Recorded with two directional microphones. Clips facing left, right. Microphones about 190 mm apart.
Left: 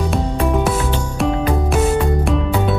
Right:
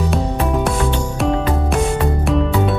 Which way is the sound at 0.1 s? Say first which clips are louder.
Left 1 dB; centre (ahead or behind).